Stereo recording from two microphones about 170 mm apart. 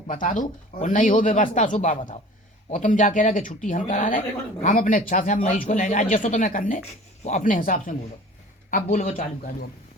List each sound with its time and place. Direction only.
0.1 s a man's voice: 50° left (ahead or behind)